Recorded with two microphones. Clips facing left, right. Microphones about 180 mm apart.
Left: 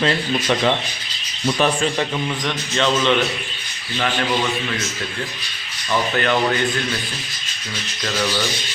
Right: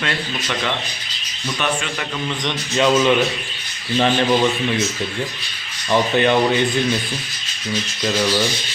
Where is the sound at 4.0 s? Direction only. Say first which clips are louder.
Right 5 dB; 25° right (ahead or behind).